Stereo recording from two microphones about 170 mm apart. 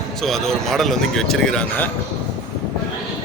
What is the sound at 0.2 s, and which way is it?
Speech, centre (ahead or behind).